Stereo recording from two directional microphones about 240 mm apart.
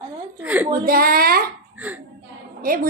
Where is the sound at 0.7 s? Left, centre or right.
Right.